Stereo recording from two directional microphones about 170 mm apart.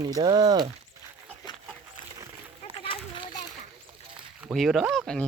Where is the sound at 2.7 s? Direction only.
30° left (ahead or behind).